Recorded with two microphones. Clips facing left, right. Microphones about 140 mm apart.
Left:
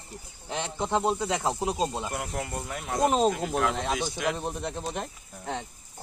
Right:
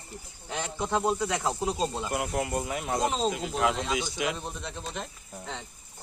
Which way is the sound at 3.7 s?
60° left (ahead or behind).